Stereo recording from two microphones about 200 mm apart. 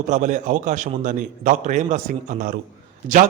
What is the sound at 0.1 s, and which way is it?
A man's voice, 40° right (ahead or behind).